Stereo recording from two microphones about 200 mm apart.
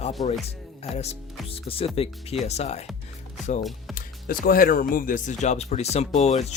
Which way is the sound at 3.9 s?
45° left (ahead or behind).